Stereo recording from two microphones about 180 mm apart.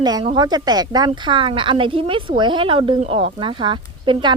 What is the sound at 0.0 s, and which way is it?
Speech, 20° right (ahead or behind).